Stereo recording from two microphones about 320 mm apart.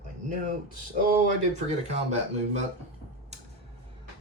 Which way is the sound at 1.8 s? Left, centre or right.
Right.